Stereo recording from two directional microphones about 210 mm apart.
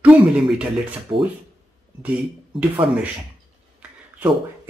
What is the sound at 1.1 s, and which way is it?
Speech, 25° right (ahead or behind).